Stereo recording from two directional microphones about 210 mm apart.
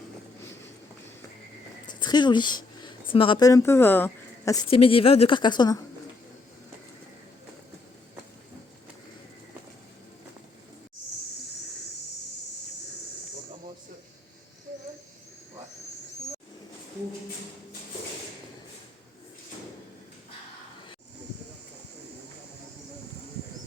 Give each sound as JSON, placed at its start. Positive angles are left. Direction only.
{"t": 1.9, "sound": "speech", "side_deg": 20}
{"t": 4.7, "sound": "a woman's voice", "side_deg": 25}